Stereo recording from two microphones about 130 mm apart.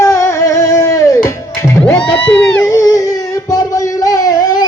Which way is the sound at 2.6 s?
25° left (ahead or behind).